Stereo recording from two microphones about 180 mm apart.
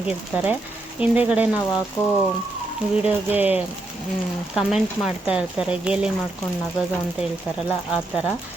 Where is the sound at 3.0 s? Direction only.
10° right (ahead or behind).